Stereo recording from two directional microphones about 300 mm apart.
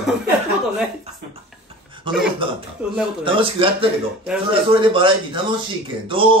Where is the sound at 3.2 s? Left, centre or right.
Centre.